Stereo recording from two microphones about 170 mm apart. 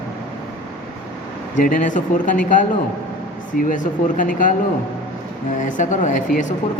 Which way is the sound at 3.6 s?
50° left (ahead or behind).